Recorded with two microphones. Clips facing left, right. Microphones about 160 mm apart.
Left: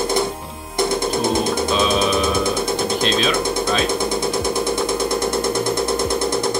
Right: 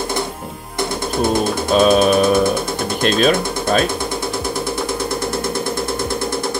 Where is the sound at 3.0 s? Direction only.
50° right (ahead or behind).